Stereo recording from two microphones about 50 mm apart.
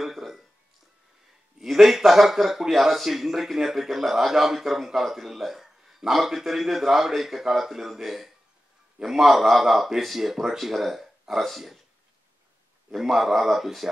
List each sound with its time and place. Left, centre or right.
0.0 s a sound: centre
1.6 s speech: centre
12.9 s speech: centre